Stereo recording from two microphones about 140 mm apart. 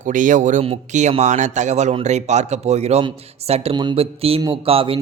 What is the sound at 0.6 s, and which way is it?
A man's voice, 50° right (ahead or behind).